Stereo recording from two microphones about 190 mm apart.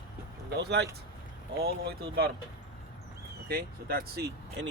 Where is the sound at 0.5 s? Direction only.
60° right (ahead or behind).